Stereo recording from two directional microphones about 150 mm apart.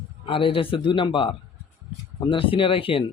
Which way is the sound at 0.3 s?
35° left (ahead or behind).